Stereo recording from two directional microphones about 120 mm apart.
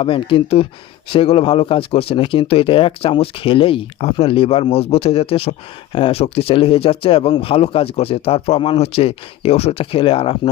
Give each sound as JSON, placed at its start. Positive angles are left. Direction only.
{"t": 0.0, "sound": "speech", "side_deg": 45}